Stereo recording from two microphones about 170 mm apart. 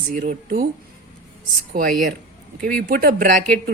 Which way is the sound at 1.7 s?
50° right (ahead or behind).